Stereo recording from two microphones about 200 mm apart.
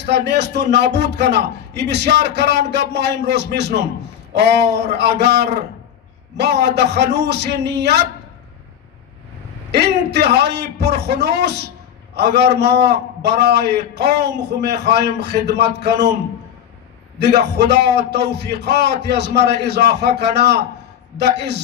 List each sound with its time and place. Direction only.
0.0 s a man's voice: 55° right (ahead or behind)
9.7 s a man's voice: 55° right (ahead or behind)
17.2 s a man's voice: 55° right (ahead or behind)